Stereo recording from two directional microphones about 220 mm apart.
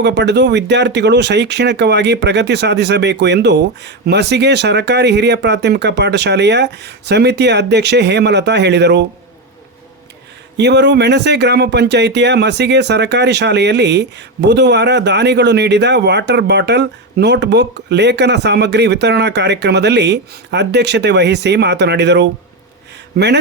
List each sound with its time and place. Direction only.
0.0 s speech: 50° right (ahead or behind)
10.6 s speech: 50° right (ahead or behind)